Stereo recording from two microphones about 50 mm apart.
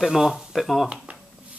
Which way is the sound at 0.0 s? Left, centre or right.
Centre.